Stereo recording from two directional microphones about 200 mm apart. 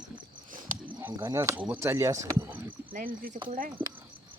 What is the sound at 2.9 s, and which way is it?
Speech, 45° right (ahead or behind).